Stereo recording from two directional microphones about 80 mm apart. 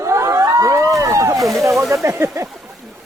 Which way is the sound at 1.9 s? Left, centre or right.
Right.